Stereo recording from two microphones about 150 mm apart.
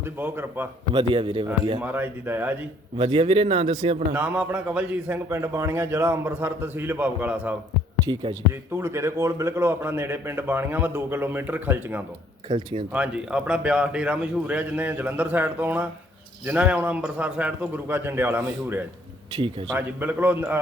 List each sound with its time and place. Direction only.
0.0 s a man's voice: 15° right (ahead or behind)
0.9 s speech: 35° right (ahead or behind)
1.8 s a man's voice: 15° right (ahead or behind)
3.0 s speech: 40° right (ahead or behind)
4.1 s a man's voice: 10° right (ahead or behind)
8.0 s speech: 30° right (ahead or behind)
8.7 s a man's voice: 15° right (ahead or behind)
12.5 s speech: 30° right (ahead or behind)
12.9 s a man's voice: 10° right (ahead or behind)